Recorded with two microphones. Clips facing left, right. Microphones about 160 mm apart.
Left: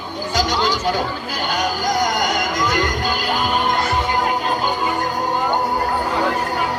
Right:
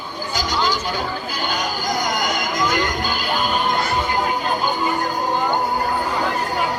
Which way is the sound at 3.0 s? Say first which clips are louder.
Left 2 dB; 80° left.